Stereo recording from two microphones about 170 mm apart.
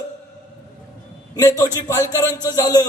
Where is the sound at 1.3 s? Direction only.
20° left (ahead or behind).